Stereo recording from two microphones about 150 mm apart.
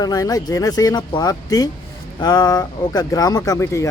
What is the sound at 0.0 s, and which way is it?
Speech, 25° left (ahead or behind).